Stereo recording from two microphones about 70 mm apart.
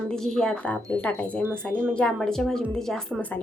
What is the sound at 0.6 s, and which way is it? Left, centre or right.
A woman's voice, left.